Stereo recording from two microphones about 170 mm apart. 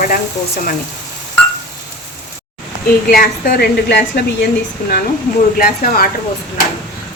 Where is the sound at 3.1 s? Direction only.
60° left (ahead or behind).